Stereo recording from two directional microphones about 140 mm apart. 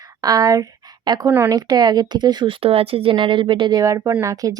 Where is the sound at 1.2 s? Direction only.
15° right (ahead or behind).